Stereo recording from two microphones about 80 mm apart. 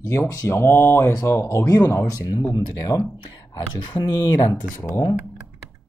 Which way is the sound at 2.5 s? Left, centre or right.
Left.